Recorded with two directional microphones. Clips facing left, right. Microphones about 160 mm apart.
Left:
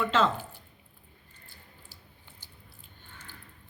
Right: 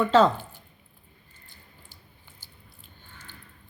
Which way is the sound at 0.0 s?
35° right (ahead or behind).